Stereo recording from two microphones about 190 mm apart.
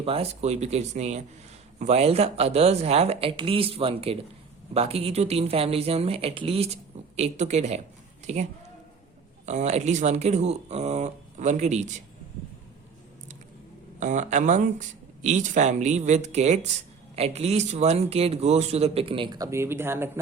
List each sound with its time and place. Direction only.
0.0 s a man's voice: 30° right (ahead or behind)
9.5 s a man's voice: 35° right (ahead or behind)
14.0 s a man's voice: 40° right (ahead or behind); by 20.1 s 10° right (ahead or behind)